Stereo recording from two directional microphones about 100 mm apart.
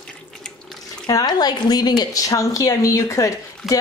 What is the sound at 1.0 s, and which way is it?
A woman's voice, 40° left (ahead or behind).